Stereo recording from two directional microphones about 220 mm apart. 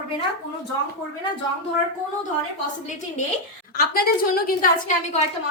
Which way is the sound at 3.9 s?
45° left (ahead or behind).